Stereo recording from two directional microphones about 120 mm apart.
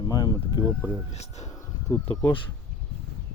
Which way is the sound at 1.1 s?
65° left (ahead or behind).